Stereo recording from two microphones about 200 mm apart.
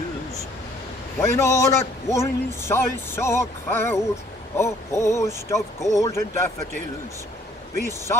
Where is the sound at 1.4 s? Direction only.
15° left (ahead or behind).